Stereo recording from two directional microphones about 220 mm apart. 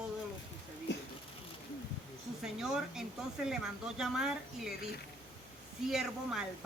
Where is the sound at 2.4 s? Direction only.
Centre (ahead or behind).